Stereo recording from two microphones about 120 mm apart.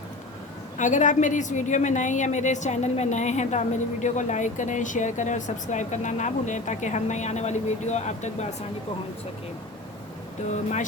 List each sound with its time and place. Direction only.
0.8 s a woman's voice: 90° left; by 8.4 s 70° left (ahead or behind)